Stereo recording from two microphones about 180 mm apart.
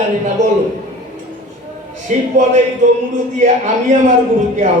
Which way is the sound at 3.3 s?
40° right (ahead or behind).